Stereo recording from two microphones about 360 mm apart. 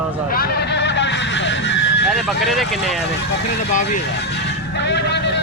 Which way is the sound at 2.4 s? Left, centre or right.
Centre.